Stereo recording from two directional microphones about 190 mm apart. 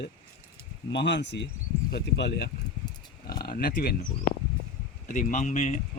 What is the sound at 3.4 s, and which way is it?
Speech, 50° left (ahead or behind).